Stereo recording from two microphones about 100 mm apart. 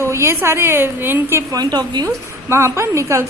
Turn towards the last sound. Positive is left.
turn(degrees=-30)  # may be behind; listen again after turning